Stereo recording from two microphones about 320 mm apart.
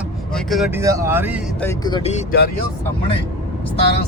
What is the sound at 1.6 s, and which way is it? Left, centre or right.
Speech, centre.